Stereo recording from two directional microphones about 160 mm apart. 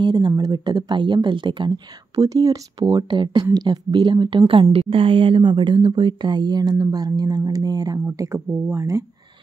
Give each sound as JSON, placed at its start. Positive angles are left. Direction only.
{"t": 0.0, "sound": "speech", "side_deg": -30}